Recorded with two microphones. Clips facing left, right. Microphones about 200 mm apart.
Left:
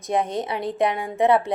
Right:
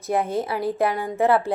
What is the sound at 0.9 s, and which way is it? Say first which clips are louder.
Speech: right 2 dB; centre (ahead or behind).